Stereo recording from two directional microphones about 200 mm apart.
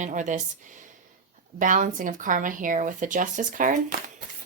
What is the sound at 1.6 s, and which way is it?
Speech, 40° right (ahead or behind).